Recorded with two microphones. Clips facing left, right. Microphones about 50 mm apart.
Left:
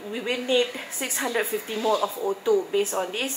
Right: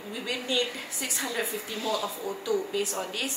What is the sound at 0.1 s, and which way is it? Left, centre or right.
A woman's voice, left.